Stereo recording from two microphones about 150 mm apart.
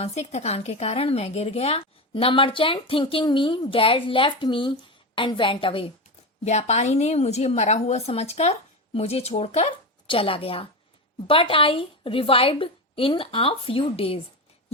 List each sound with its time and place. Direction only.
0.0 s speech: 45° left (ahead or behind)
6.4 s a woman's voice: 50° left (ahead or behind)